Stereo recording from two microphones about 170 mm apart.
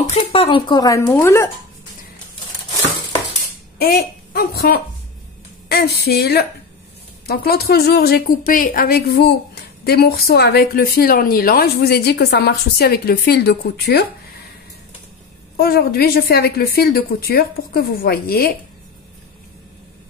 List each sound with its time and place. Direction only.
0.1 s speech: 35° left (ahead or behind); by 1.5 s 15° left (ahead or behind)
3.7 s a woman's voice: 65° left (ahead or behind)
15.5 s a woman's voice: 65° left (ahead or behind)